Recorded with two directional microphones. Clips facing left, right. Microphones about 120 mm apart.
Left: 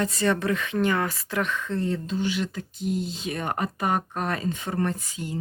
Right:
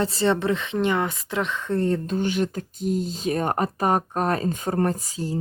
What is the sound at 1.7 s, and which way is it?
Speech, 50° right (ahead or behind).